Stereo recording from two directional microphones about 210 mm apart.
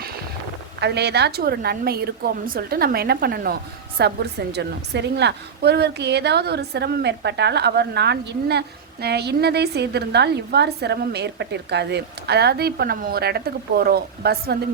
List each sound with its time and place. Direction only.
0.8 s a woman's voice: 50° right (ahead or behind)